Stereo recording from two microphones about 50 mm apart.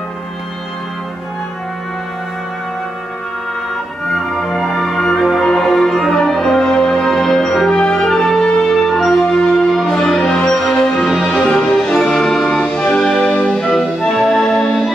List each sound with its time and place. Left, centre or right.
4.1 s music: centre
7.7 s music: centre
11.1 s music: centre
11.9 s music: centre